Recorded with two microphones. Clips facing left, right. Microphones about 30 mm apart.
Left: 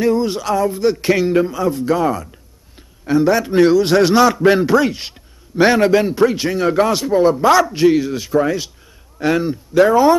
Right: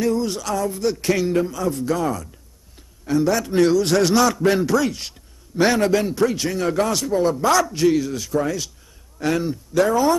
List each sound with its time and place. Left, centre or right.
0.0 s a man's voice: left